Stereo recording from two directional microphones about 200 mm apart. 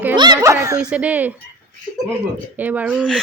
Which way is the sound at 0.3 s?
15° right (ahead or behind).